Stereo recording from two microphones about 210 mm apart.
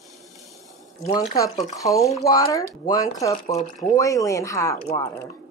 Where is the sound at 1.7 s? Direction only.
15° left (ahead or behind).